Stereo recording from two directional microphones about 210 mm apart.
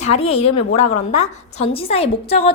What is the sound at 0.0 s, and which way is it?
A woman's voice, 30° left (ahead or behind).